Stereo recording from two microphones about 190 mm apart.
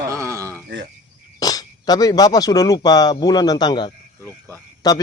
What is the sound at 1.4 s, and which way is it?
Speech, 20° left (ahead or behind).